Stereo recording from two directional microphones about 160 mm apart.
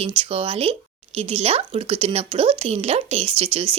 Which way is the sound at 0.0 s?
35° right (ahead or behind).